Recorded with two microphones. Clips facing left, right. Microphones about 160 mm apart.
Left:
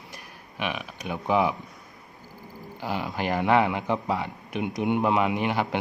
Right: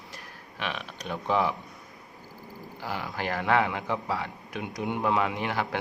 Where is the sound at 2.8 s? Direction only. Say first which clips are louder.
Left 4 dB; 20° left (ahead or behind).